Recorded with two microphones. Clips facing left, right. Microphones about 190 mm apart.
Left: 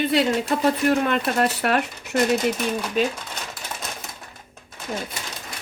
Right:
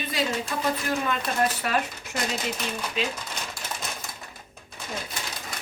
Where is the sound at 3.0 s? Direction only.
45° left (ahead or behind).